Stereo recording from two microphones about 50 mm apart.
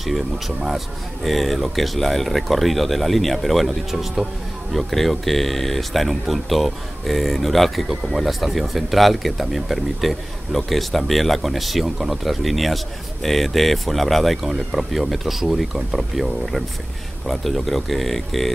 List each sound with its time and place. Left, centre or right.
0.0 s speech: centre